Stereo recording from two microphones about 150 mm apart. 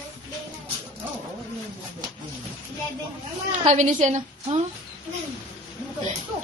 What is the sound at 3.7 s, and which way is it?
Speech, 50° right (ahead or behind).